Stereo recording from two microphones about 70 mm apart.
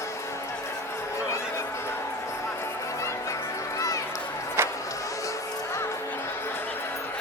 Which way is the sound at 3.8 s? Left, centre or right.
Left.